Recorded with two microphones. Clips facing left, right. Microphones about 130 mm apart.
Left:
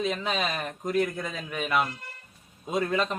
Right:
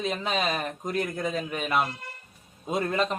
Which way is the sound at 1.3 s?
35° right (ahead or behind).